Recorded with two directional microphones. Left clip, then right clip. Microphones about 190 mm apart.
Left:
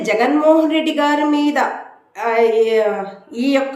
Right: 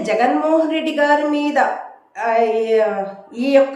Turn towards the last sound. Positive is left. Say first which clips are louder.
# right 3 dB
turn(degrees=5)  # may be behind; listen again after turning